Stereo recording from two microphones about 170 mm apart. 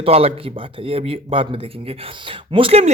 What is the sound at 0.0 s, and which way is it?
Speech, 35° right (ahead or behind).